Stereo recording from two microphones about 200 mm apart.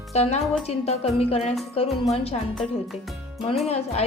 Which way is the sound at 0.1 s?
35° left (ahead or behind).